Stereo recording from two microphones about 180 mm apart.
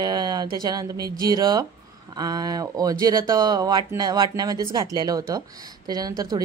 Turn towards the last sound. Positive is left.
turn(degrees=-20)  # may be behind; listen again after turning